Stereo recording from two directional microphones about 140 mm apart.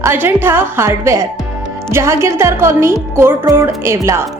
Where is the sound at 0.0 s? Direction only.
15° right (ahead or behind).